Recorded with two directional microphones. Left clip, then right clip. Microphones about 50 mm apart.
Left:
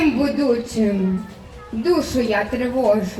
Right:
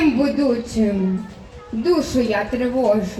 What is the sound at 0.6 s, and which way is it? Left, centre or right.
A woman's voice, left.